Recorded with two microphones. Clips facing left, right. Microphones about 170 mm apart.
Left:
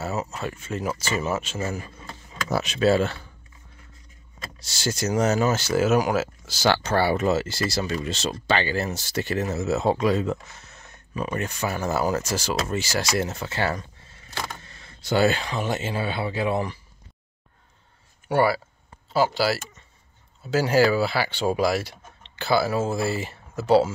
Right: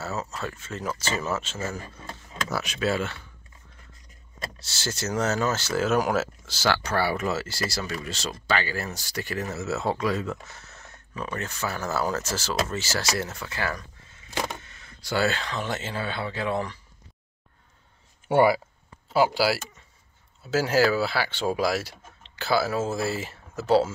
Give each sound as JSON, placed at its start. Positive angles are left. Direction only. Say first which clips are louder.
{"t": 0.0, "sound": "speech", "louder": "left 3 dB", "side_deg": 15}
{"t": 2.5, "sound": "speech", "louder": "left 7 dB", "side_deg": 25}
{"t": 4.6, "sound": "speech", "louder": "left 6 dB", "side_deg": 15}
{"t": 6.5, "sound": "speech", "louder": "left 4 dB", "side_deg": 20}
{"t": 18.3, "sound": "speech", "louder": "right 2 dB", "side_deg": -20}